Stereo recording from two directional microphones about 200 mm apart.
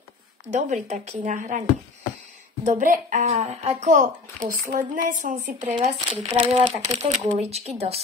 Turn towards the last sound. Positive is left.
turn(degrees=-30)  # may be behind; listen again after turning